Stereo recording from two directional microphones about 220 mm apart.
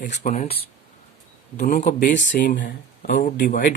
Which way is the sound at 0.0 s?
35° left (ahead or behind).